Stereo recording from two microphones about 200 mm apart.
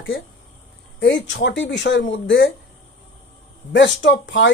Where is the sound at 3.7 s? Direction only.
60° left (ahead or behind).